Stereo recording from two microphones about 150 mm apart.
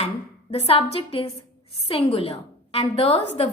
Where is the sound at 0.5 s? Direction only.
45° left (ahead or behind).